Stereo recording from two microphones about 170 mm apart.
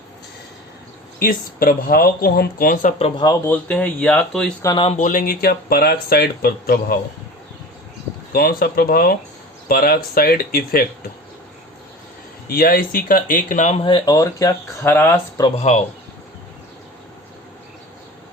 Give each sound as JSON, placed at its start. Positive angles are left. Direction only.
{"t": 1.2, "sound": "speech", "side_deg": 55}
{"t": 3.0, "sound": "speech", "side_deg": 25}
{"t": 3.4, "sound": "speech", "side_deg": 10}
{"t": 4.6, "sound": "speech", "side_deg": 25}
{"t": 4.9, "sound": "speech", "side_deg": 50}
{"t": 8.3, "sound": "speech", "side_deg": 65}
{"t": 12.5, "sound": "speech", "side_deg": 60}
{"t": 15.4, "sound": "speech", "side_deg": 40}